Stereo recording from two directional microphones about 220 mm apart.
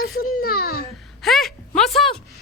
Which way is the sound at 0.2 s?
40° left (ahead or behind).